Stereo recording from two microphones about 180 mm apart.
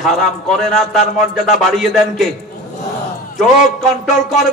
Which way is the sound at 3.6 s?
40° left (ahead or behind).